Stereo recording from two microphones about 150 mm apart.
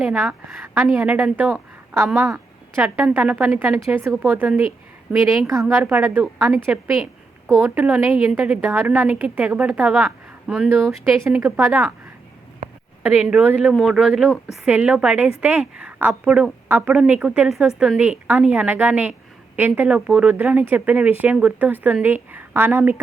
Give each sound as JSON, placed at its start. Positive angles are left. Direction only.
{"t": 0.0, "sound": "a woman's voice", "side_deg": -5}
{"t": 0.6, "sound": "a woman's voice", "side_deg": -15}
{"t": 11.2, "sound": "a woman's voice", "side_deg": -15}
{"t": 11.7, "sound": "a woman's voice", "side_deg": -5}
{"t": 13.0, "sound": "a woman's voice", "side_deg": -10}